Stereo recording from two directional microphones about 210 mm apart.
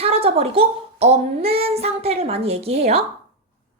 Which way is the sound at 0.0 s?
30° right (ahead or behind).